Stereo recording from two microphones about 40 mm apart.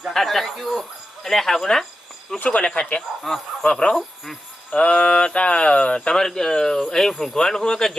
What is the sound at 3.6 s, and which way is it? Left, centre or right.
Speech, left.